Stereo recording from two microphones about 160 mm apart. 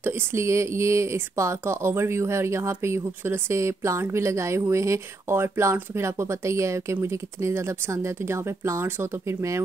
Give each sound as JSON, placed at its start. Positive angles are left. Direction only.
{"t": 0.0, "sound": "speech", "side_deg": -15}